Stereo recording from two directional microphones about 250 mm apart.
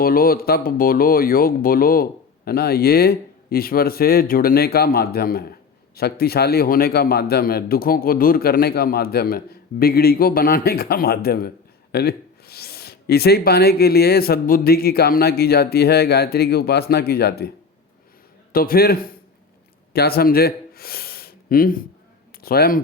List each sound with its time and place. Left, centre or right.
0.0 s a man's voice: left
18.5 s a man's voice: left